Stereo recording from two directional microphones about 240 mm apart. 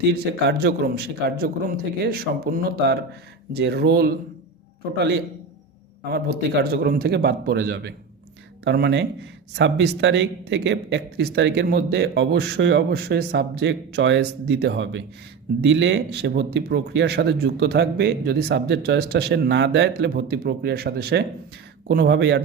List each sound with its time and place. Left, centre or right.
0.1 s a man's voice: right
6.6 s a man's voice: right